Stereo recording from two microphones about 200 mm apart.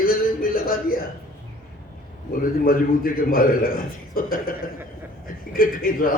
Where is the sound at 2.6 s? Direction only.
45° left (ahead or behind).